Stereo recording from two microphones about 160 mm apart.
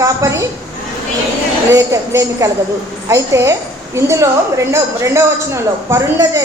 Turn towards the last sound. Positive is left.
turn(degrees=-15)  # may be behind; listen again after turning